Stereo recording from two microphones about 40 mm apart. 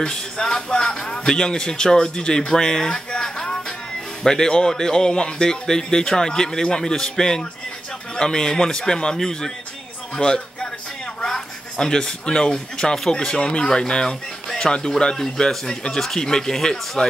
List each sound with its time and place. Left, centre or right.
0.0 s a man's voice: centre